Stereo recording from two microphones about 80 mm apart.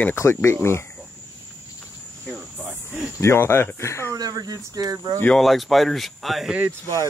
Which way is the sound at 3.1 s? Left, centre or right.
Left.